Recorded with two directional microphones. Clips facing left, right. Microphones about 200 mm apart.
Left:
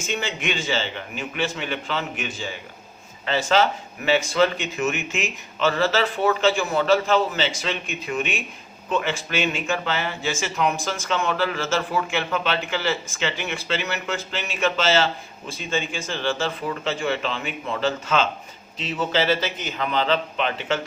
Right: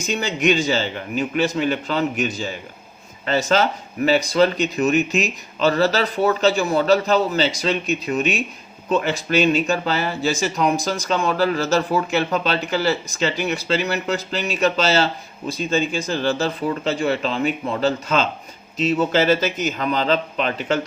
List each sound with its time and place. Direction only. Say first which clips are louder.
0.0 s a man's voice: right 6 dB; 40° right (ahead or behind)